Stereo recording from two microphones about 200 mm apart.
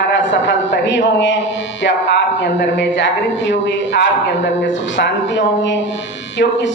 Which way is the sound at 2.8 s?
65° left (ahead or behind).